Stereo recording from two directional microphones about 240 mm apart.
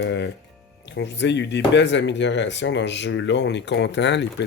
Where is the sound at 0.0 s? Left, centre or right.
Left.